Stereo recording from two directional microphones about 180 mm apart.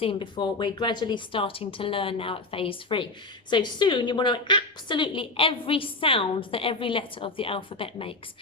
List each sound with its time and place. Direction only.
0.0 s a woman's voice: 30° left (ahead or behind)